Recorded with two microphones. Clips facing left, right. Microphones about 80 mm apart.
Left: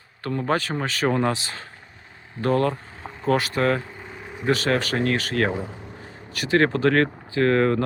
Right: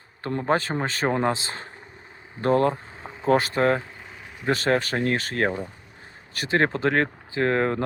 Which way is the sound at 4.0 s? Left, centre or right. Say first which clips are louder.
Left 5 dB; centre.